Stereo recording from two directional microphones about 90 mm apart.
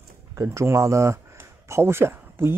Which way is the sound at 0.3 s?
35° right (ahead or behind).